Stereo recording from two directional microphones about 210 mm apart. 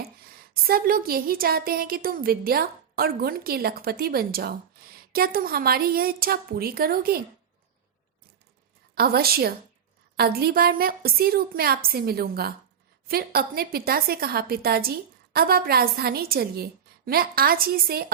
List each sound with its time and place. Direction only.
0.0 s speech: 45° right (ahead or behind)
9.0 s speech: 45° right (ahead or behind)